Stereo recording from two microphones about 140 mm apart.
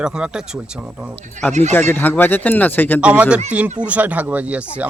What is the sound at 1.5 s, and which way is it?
Speech, 55° right (ahead or behind).